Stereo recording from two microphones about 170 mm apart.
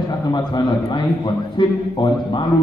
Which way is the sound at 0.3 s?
25° left (ahead or behind).